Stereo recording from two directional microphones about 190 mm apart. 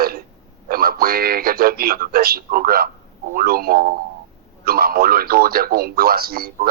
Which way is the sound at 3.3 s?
50° right (ahead or behind).